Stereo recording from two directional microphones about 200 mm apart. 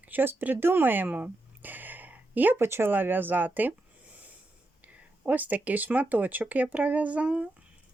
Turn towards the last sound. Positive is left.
turn(degrees=-5)  # may be behind; listen again after turning